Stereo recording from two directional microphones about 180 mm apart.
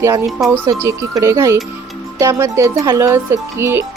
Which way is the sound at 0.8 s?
15° right (ahead or behind).